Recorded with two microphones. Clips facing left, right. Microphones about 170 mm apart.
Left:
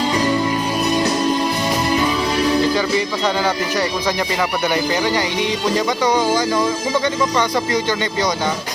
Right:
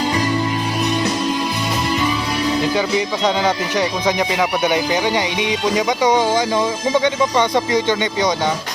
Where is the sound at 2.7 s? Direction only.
15° right (ahead or behind).